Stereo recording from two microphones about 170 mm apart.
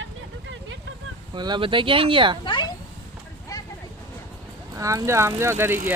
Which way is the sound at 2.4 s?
30° left (ahead or behind).